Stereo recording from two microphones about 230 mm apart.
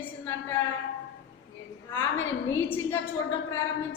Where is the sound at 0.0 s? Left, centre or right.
Centre.